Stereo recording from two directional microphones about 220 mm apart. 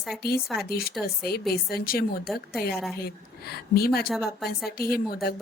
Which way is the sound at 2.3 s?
Centre (ahead or behind).